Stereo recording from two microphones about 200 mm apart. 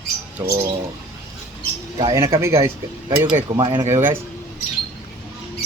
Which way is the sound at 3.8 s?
10° right (ahead or behind).